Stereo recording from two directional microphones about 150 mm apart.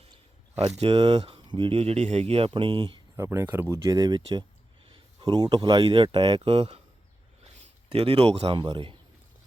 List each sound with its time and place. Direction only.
0.8 s speech: 40° right (ahead or behind)
3.2 s speech: 15° right (ahead or behind); by 6.7 s 40° right (ahead or behind)
7.9 s speech: 40° right (ahead or behind)